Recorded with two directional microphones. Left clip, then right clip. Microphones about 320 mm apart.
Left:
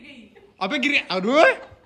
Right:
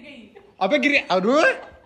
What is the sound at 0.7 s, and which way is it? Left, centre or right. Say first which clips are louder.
Speech: right 3 dB; centre.